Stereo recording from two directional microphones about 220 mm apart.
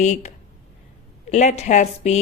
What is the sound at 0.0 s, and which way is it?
A woman's voice, 30° left (ahead or behind).